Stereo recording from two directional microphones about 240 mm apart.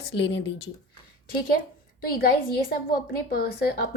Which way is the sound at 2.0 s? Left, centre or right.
Left.